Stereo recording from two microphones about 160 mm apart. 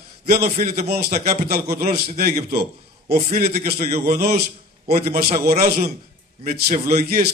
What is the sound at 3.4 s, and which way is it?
A man's voice, 70° right (ahead or behind).